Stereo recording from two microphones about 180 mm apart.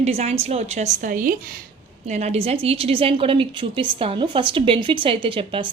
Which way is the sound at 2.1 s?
40° right (ahead or behind).